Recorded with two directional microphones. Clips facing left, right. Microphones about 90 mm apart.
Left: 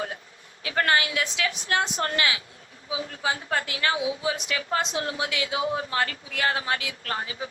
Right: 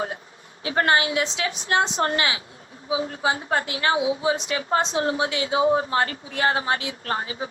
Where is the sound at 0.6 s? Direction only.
30° right (ahead or behind).